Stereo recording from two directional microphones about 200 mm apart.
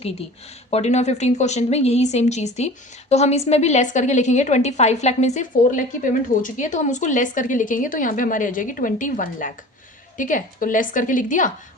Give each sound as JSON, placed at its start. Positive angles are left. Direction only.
{"t": 0.7, "sound": "speech", "side_deg": 35}